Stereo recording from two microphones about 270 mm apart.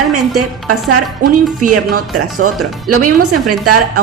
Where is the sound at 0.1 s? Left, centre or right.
Right.